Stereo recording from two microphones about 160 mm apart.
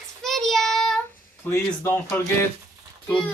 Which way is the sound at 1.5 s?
15° left (ahead or behind).